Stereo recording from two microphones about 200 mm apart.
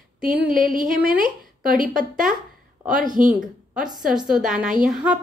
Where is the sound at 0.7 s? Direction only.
45° right (ahead or behind).